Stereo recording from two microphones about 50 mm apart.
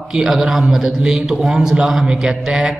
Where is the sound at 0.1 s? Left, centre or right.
Centre.